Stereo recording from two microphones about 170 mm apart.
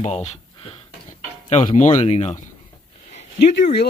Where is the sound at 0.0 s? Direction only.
40° left (ahead or behind).